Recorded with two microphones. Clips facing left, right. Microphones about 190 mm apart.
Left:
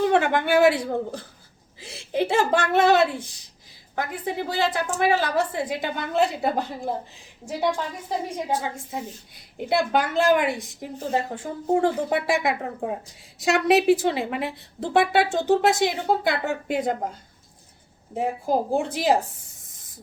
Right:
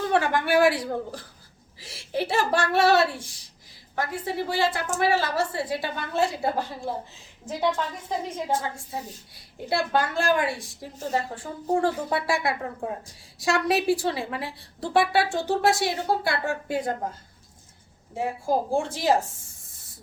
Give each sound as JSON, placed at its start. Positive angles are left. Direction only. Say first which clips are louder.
{"t": 0.1, "sound": "a woman's voice", "louder": "left 2 dB", "side_deg": 20}
{"t": 18.1, "sound": "a woman's voice", "louder": "left 2 dB", "side_deg": 20}